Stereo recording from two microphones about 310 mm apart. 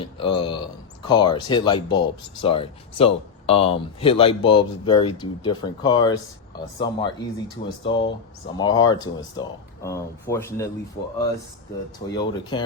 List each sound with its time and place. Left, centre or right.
0.0 s speech: centre
12.1 s speech: centre